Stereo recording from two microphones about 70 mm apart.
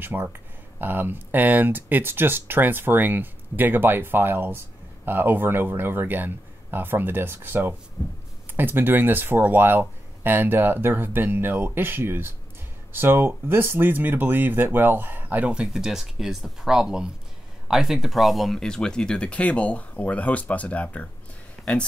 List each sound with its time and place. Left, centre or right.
0.0 s speech: right; by 21.1 s left